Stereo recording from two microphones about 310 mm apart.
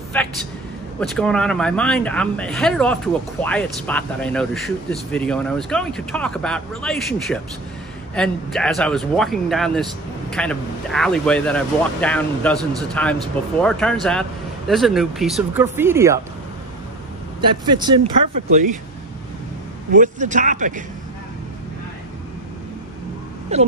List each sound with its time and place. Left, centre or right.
0.1 s speech: centre
17.4 s speech: centre
19.9 s speech: right
23.5 s speech: right